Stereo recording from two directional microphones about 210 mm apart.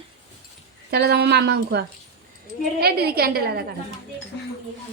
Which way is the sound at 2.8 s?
50° right (ahead or behind).